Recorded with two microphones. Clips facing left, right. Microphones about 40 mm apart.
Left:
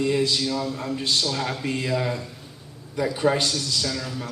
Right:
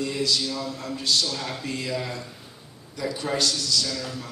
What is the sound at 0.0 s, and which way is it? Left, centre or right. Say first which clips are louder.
A man's voice: left 4 dB; left.